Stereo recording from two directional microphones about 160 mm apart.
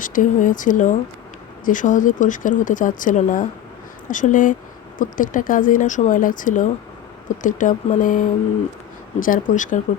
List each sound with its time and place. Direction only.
0.0 s speech: 55° left (ahead or behind)